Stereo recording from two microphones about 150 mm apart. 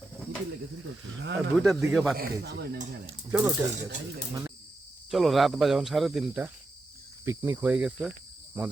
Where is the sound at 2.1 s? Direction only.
85° right.